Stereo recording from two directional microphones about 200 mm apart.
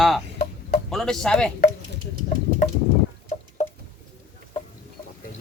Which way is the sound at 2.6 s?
35° left (ahead or behind).